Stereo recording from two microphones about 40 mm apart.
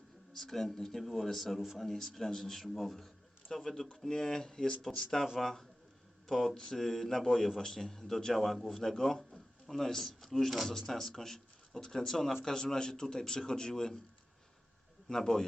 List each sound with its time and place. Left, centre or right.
0.3 s a man's voice: centre
15.1 s a man's voice: centre